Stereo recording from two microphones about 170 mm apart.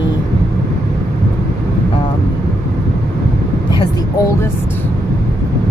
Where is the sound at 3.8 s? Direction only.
20° left (ahead or behind).